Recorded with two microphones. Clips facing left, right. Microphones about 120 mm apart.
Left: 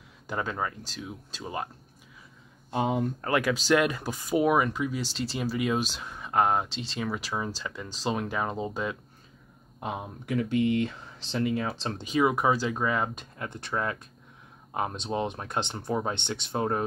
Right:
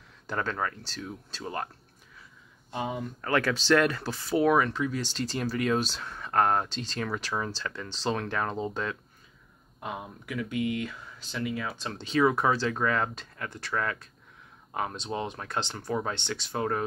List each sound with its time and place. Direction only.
0.3 s speech: 10° left (ahead or behind)
2.7 s speech: 50° left (ahead or behind)
3.3 s speech: 10° left (ahead or behind)
9.8 s speech: 25° left (ahead or behind)
12.0 s speech: 15° left (ahead or behind)